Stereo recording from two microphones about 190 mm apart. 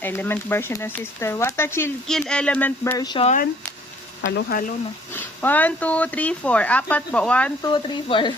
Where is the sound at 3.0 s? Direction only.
25° left (ahead or behind).